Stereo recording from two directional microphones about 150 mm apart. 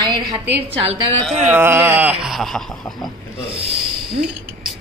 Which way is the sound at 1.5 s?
15° right (ahead or behind).